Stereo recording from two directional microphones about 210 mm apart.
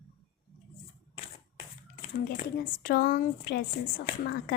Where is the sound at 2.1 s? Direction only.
40° left (ahead or behind).